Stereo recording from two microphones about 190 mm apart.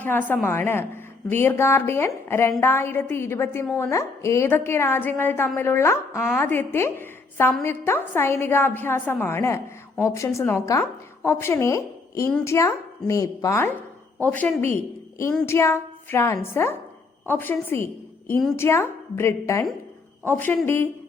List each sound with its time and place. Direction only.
0.0 s a woman's voice: 10° left (ahead or behind)